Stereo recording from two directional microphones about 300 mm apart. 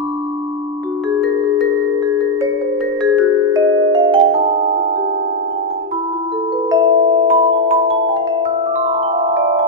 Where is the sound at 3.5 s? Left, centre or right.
Centre.